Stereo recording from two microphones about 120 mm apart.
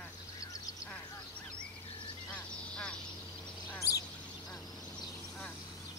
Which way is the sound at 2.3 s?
10° left (ahead or behind).